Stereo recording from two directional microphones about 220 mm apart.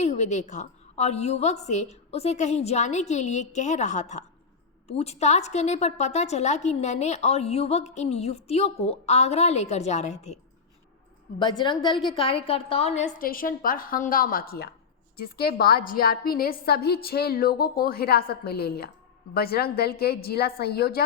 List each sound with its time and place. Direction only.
0.0 s a woman's voice: 30° left (ahead or behind)
11.3 s a woman's voice: 20° left (ahead or behind); by 21.0 s 45° left (ahead or behind)